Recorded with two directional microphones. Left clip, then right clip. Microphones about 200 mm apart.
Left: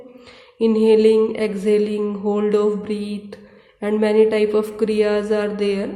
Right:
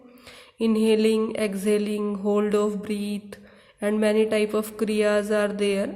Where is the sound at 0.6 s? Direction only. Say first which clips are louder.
Left 7 dB; 35° right (ahead or behind).